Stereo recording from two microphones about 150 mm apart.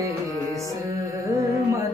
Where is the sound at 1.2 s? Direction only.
25° right (ahead or behind).